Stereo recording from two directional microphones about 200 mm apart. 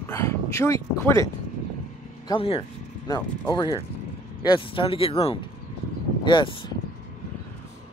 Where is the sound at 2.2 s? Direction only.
25° left (ahead or behind).